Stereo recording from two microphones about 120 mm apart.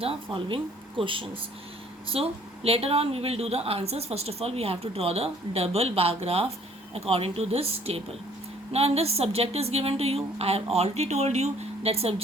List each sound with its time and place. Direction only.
0.0 s speech: 45° right (ahead or behind)